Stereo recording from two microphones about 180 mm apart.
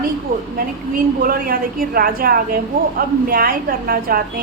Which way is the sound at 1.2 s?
55° right (ahead or behind).